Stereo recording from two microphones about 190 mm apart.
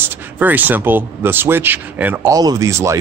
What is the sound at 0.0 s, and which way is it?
Speech, 10° right (ahead or behind).